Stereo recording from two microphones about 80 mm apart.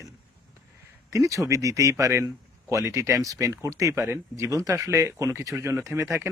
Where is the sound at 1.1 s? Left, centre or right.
Right.